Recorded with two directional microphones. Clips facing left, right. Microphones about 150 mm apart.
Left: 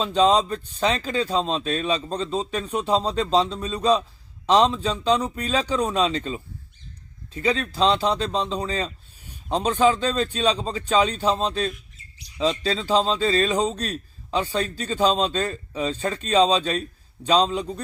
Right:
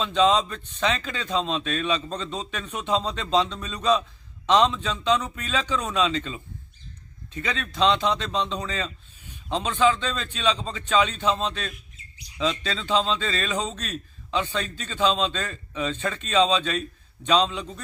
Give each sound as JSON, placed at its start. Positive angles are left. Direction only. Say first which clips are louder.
{"t": 0.0, "sound": "a man's voice", "louder": "left 2 dB", "side_deg": 35}